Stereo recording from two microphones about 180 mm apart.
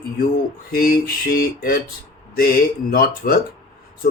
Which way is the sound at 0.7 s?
55° left (ahead or behind).